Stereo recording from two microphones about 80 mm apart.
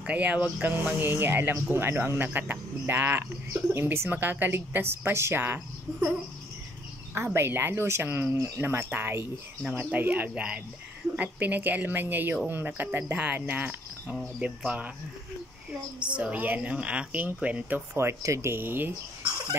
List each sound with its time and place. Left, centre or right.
0.0 s speech: centre
7.3 s speech: right
16.0 s speech: centre
17.9 s speech: right